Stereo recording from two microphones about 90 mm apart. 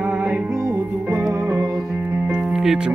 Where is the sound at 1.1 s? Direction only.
20° right (ahead or behind).